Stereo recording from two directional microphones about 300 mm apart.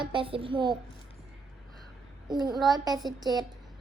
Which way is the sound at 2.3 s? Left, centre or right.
Centre.